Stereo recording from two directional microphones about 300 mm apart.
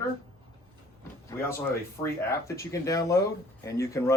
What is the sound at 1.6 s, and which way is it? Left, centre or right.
Speech, centre.